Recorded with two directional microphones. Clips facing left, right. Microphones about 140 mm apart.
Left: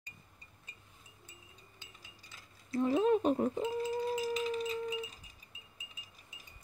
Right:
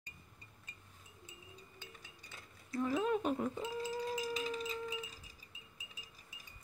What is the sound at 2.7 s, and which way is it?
Speech, 30° left (ahead or behind).